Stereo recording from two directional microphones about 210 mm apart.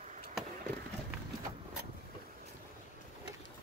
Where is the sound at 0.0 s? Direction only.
35° right (ahead or behind).